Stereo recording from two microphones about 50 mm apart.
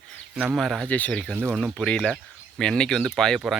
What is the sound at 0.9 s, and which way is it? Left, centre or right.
Speech, left.